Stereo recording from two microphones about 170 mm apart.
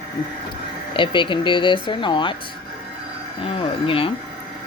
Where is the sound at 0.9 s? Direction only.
30° left (ahead or behind).